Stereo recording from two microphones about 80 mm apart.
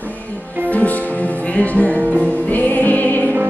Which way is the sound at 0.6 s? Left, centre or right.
Centre.